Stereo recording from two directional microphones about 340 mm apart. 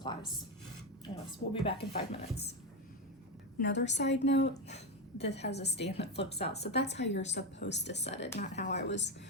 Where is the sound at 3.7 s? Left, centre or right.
Left.